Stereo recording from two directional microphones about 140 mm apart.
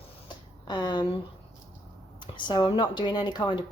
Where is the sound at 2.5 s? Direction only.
35° left (ahead or behind).